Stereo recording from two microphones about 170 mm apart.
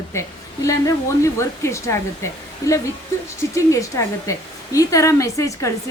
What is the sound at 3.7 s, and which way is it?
A woman's voice, 20° left (ahead or behind).